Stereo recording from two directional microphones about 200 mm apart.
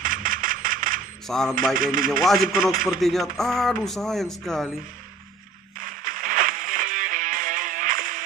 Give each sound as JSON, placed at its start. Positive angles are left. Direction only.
{"t": 0.0, "sound": "a sound", "side_deg": -40}
{"t": 1.2, "sound": "speech", "side_deg": 0}
{"t": 1.8, "sound": "speech", "side_deg": -45}
{"t": 2.0, "sound": "speech", "side_deg": 0}
{"t": 5.9, "sound": "music", "side_deg": -45}